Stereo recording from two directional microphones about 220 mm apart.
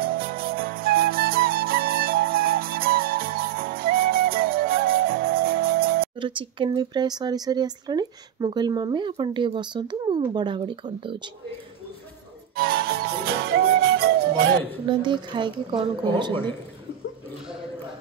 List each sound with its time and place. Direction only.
0.0 s music: 40° right (ahead or behind)
6.1 s speech: 20° right (ahead or behind)
12.5 s music: 45° right (ahead or behind)
14.9 s speech: 20° right (ahead or behind)